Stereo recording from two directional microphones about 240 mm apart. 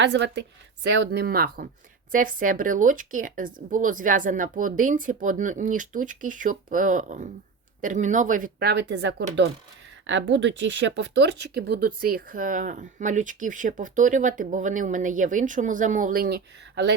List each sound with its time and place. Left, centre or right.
0.0 s a woman's voice: right